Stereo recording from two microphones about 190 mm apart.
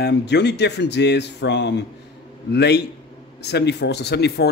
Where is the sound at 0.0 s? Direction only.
65° left (ahead or behind).